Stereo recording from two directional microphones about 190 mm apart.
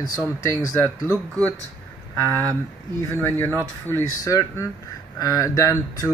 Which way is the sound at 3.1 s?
10° left (ahead or behind).